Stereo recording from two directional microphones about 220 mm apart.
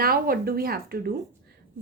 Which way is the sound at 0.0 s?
40° right (ahead or behind).